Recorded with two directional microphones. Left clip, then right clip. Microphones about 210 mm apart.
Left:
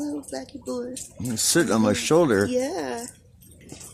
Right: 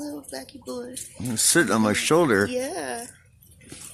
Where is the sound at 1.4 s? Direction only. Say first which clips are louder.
Right 1 dB; 15° right (ahead or behind).